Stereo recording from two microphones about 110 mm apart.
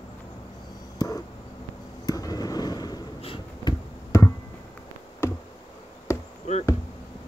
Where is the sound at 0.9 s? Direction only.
35° left (ahead or behind).